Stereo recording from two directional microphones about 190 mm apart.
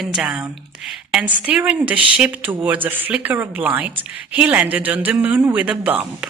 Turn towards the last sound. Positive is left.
turn(degrees=-5)  # may be behind; listen again after turning